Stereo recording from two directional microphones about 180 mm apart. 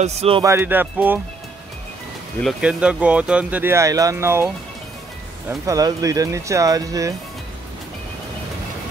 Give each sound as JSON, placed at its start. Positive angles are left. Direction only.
{"t": 0.0, "sound": "speech", "side_deg": -35}
{"t": 0.4, "sound": "speech", "side_deg": -15}
{"t": 2.4, "sound": "speech", "side_deg": -5}
{"t": 5.7, "sound": "speech", "side_deg": -20}